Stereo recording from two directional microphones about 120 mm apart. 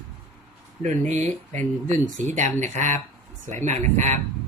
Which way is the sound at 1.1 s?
85° right.